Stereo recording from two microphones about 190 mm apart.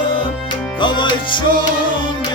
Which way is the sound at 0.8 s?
25° left (ahead or behind).